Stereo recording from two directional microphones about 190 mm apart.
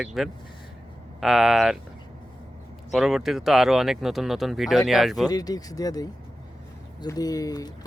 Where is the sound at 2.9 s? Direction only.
Centre (ahead or behind).